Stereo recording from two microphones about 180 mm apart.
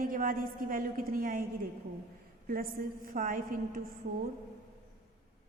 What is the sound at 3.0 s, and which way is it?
Speech, 50° right (ahead or behind).